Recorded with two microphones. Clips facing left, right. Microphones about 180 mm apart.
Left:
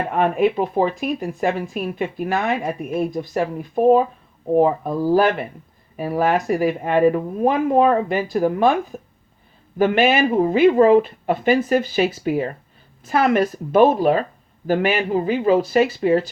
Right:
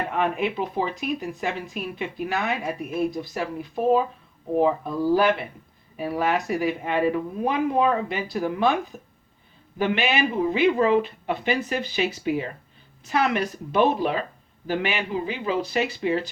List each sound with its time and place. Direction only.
0.1 s speech: 45° left (ahead or behind)